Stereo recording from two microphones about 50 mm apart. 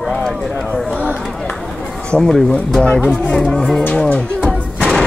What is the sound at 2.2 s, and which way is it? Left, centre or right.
Speech, centre.